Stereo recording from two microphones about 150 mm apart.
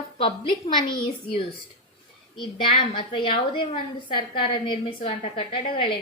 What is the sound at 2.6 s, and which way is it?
A woman's voice, 35° left (ahead or behind).